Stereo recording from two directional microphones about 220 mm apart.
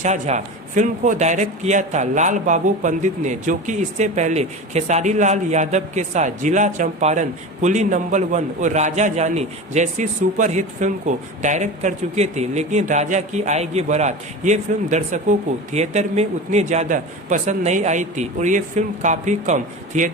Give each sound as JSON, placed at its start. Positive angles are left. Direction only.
{"t": 0.0, "sound": "speech", "side_deg": -30}